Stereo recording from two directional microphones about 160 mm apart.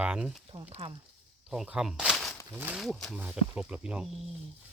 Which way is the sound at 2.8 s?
Centre (ahead or behind).